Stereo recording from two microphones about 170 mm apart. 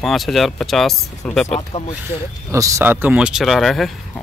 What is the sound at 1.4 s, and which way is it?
Speech, 40° left (ahead or behind).